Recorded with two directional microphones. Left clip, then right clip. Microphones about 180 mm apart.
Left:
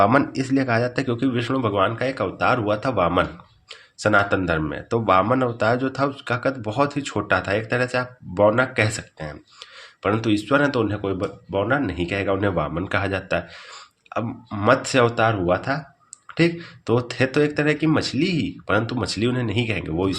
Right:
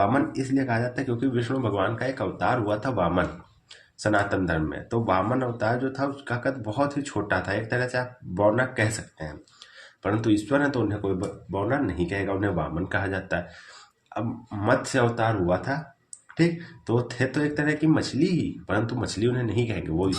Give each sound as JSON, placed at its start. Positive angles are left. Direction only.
{"t": 0.0, "sound": "speech", "side_deg": 45}